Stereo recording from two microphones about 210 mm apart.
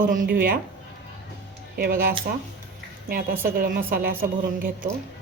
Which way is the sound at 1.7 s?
45° right (ahead or behind).